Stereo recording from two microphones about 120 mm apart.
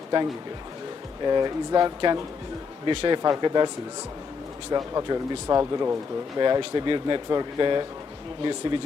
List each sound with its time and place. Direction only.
1.2 s speech: 40° right (ahead or behind)
4.7 s speech: 30° right (ahead or behind)